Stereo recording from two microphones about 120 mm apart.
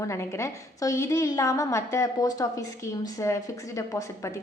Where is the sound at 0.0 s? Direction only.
25° left (ahead or behind).